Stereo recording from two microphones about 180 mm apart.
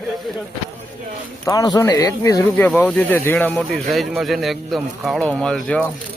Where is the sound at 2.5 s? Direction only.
10° left (ahead or behind).